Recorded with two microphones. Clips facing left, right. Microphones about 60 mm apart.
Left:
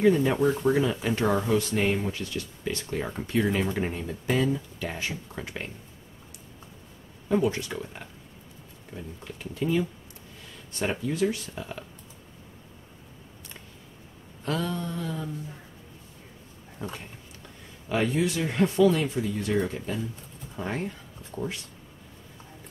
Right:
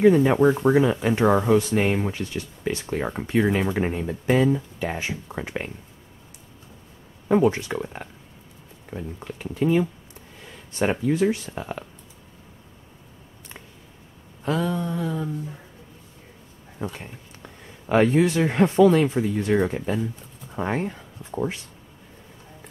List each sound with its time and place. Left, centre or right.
0.1 s speech: right
7.2 s speech: right
9.4 s a sound: centre
10.8 s speech: right
14.4 s a sound: centre
16.8 s speech: right
17.8 s speech: right